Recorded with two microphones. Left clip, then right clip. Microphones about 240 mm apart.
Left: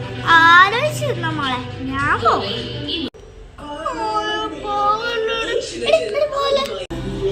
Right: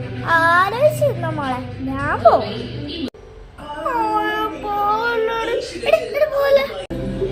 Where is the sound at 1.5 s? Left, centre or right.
Centre.